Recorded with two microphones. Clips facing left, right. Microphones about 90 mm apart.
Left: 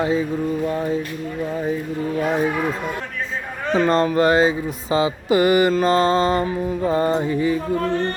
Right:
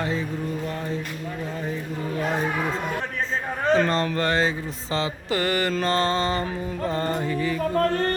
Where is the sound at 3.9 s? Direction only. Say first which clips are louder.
Left 7 dB; 15° left (ahead or behind).